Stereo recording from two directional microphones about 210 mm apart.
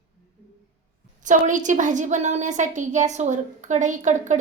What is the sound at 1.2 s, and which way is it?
A woman's voice, 35° right (ahead or behind).